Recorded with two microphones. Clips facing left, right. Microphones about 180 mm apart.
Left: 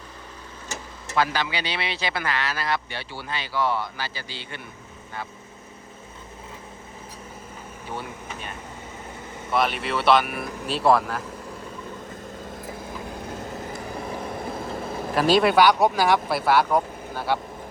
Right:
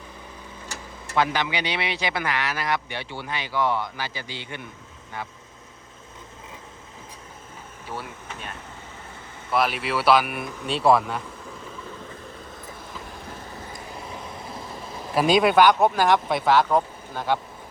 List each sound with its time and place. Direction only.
1.1 s speech: 20° right (ahead or behind)
7.9 s speech: centre (ahead or behind)
15.1 s speech: centre (ahead or behind)